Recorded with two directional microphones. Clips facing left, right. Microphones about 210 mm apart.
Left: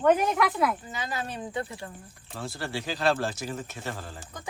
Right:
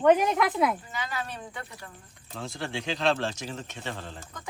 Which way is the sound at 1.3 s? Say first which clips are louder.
Left 7 dB; 25° left (ahead or behind).